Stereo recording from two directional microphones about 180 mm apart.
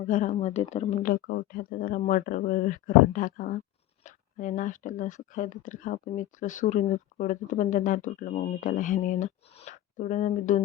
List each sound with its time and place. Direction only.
0.0 s speech: 45° left (ahead or behind)
1.1 s speech: 55° left (ahead or behind)